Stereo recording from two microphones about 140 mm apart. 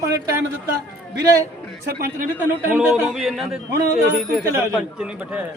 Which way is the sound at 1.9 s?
90° right.